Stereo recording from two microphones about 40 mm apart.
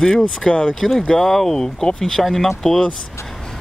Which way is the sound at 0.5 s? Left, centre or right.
Centre.